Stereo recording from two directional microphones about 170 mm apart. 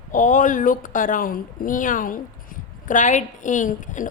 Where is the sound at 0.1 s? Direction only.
50° left (ahead or behind).